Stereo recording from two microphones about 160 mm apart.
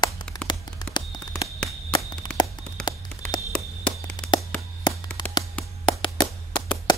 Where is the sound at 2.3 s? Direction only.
5° left (ahead or behind).